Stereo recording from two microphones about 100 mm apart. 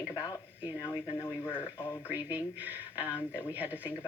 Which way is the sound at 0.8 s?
25° left (ahead or behind).